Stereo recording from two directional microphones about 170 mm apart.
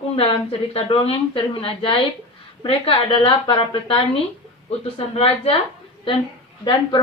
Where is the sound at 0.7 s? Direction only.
35° left (ahead or behind).